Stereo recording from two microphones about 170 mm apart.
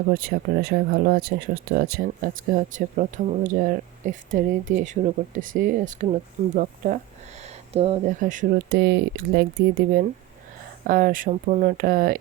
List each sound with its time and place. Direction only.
0.1 s speech: 65° right (ahead or behind); by 8.1 s 35° right (ahead or behind)
8.2 s speech: 50° right (ahead or behind)
8.7 s speech: 75° right (ahead or behind)
10.8 s speech: 55° right (ahead or behind)
11.8 s speech: 55° right (ahead or behind)